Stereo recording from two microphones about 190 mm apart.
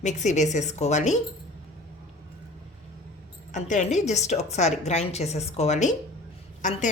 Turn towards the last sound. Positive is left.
turn(degrees=40)  # may be behind; listen again after turning